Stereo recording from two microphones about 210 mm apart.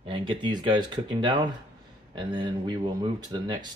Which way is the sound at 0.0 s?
25° right (ahead or behind).